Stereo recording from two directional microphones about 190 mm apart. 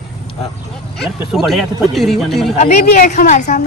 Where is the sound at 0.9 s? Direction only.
Centre (ahead or behind).